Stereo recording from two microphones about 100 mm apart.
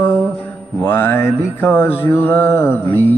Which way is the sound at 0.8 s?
20° left (ahead or behind).